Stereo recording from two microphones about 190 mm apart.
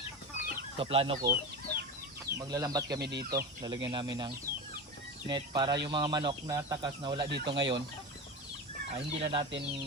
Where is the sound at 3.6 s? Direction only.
25° right (ahead or behind).